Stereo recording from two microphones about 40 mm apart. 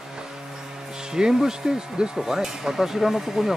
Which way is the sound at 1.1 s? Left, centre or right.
Centre.